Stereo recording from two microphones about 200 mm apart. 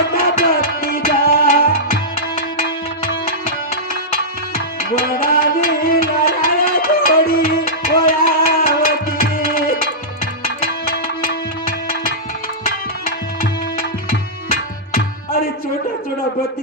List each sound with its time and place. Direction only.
0.0 s music: 50° left (ahead or behind)
5.1 s music: 45° left (ahead or behind)
10.7 s music: 50° left (ahead or behind)
12.6 s music: 45° left (ahead or behind)
14.1 s tabla: 45° left (ahead or behind)